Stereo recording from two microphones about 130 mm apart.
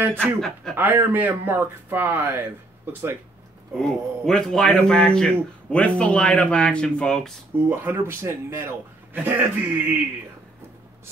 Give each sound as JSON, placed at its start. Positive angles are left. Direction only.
{"t": 0.2, "sound": "speech", "side_deg": 5}
{"t": 0.7, "sound": "a man's voice", "side_deg": -15}
{"t": 3.8, "sound": "a man's voice", "side_deg": 5}
{"t": 7.5, "sound": "a man's voice", "side_deg": -15}